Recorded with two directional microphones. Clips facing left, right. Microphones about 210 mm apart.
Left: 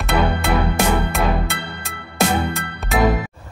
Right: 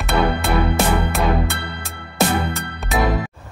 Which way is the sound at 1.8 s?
Centre (ahead or behind).